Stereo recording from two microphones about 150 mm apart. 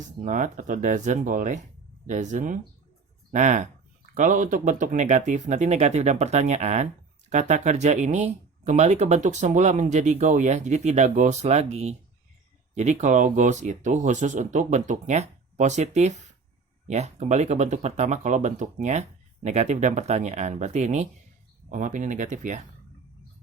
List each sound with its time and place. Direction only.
0.0 s speech: 55° right (ahead or behind)